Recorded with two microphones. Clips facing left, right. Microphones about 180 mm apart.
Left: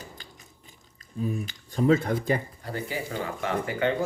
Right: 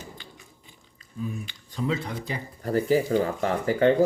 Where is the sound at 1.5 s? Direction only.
45° left (ahead or behind).